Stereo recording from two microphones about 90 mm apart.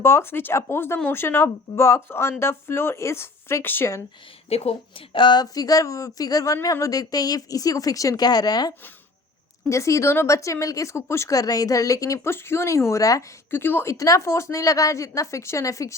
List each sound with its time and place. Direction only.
0.0 s speech: 30° left (ahead or behind)
4.4 s speech: 90° left; by 8.7 s 50° left (ahead or behind)
9.6 s speech: 35° left (ahead or behind)
13.5 s speech: 25° left (ahead or behind)
13.9 s speech: 40° left (ahead or behind)